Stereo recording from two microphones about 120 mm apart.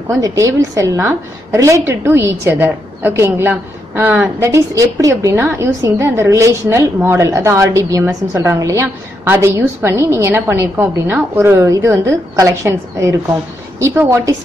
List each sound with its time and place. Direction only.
0.1 s a woman's voice: 25° right (ahead or behind)